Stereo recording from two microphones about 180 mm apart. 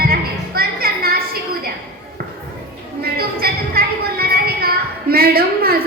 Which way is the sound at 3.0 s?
60° right (ahead or behind).